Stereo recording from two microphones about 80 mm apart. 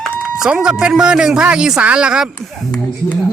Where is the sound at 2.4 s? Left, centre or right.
Centre.